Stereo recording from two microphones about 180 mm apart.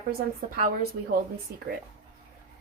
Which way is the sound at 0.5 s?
50° right (ahead or behind).